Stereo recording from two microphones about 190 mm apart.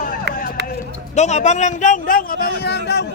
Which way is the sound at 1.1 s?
35° left (ahead or behind).